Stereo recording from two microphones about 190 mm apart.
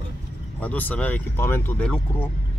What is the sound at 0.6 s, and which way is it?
Speech, 10° left (ahead or behind).